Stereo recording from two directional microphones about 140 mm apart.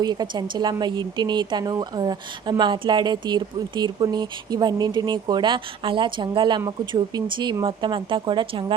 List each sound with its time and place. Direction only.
0.0 s a woman's voice: 30° right (ahead or behind)